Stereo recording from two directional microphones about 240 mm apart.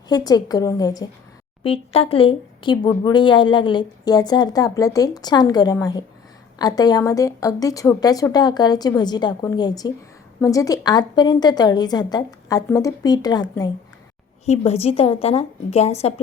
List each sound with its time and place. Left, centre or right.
0.1 s a woman's voice: centre